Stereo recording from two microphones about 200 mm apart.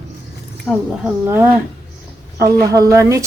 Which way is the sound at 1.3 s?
10° right (ahead or behind).